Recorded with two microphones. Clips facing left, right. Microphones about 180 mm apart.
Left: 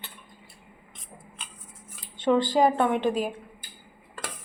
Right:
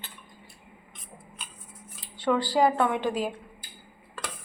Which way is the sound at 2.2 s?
20° left (ahead or behind).